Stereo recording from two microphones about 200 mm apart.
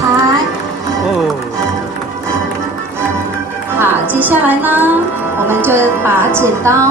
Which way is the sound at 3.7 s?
10° right (ahead or behind).